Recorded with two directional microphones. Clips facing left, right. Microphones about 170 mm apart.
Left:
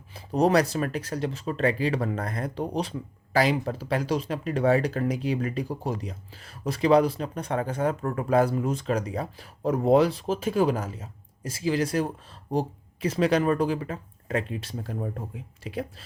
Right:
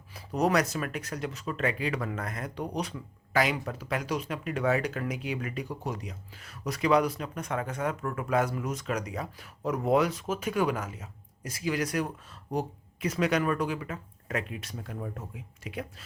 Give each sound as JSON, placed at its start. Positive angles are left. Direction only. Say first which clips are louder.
{"t": 0.1, "sound": "speech", "louder": "left 5 dB", "side_deg": 30}